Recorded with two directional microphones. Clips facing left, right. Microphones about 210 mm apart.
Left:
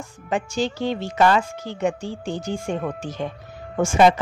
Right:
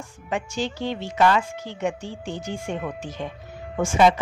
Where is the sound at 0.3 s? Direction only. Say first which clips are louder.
Left 3 dB; 40° left (ahead or behind).